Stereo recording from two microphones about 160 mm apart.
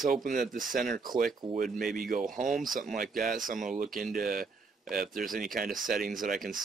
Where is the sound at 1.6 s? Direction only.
Centre (ahead or behind).